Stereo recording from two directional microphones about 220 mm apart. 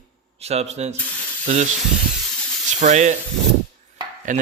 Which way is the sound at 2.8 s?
35° right (ahead or behind).